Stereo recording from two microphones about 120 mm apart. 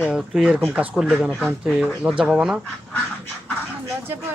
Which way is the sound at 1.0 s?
Centre (ahead or behind).